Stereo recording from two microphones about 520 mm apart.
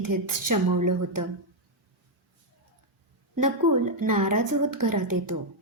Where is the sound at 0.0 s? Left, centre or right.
Right.